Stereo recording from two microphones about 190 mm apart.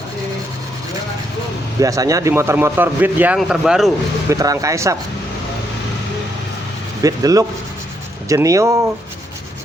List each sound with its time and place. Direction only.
1.8 s speech: 15° right (ahead or behind); by 3.9 s centre (ahead or behind)
4.3 s speech: 15° right (ahead or behind)
7.0 s speech: 20° right (ahead or behind)